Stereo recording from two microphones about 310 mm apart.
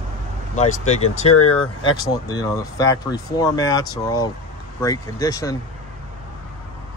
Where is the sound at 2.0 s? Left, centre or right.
Centre.